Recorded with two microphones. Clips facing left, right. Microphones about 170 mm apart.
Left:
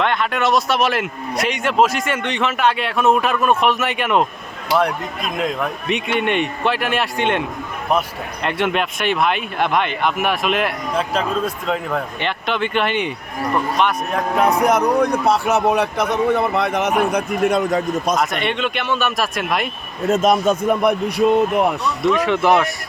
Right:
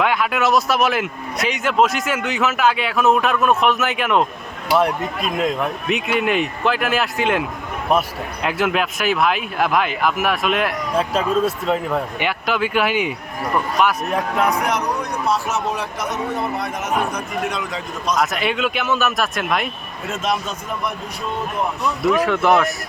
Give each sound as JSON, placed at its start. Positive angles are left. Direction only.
{"t": 0.0, "sound": "speech", "side_deg": -5}
{"t": 5.5, "sound": "speech", "side_deg": -5}
{"t": 14.6, "sound": "a man's voice", "side_deg": 50}
{"t": 18.2, "sound": "speech", "side_deg": -5}
{"t": 20.1, "sound": "a man's voice", "side_deg": 45}
{"t": 22.0, "sound": "speech", "side_deg": -5}